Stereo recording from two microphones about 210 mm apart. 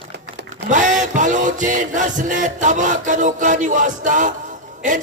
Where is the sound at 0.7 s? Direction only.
35° right (ahead or behind).